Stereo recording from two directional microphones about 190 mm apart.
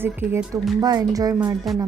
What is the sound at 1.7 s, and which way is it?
Speech, centre (ahead or behind).